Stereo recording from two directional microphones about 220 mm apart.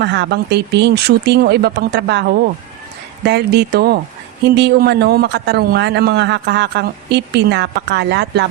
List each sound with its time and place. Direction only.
0.0 s speech: 50° right (ahead or behind)